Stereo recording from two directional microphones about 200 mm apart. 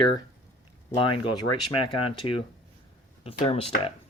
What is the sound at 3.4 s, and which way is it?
Speech, 30° left (ahead or behind).